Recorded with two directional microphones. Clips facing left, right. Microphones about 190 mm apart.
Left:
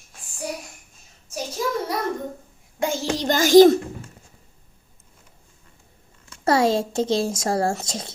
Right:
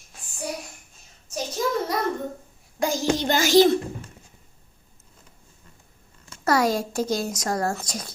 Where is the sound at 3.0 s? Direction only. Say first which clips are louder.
Left 1 dB; 40° left (ahead or behind).